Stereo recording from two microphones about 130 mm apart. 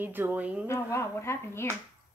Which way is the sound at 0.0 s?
15° right (ahead or behind).